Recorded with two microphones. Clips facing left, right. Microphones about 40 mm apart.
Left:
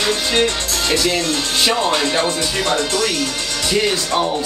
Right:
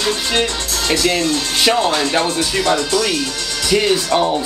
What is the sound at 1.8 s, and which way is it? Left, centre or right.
Speech, left.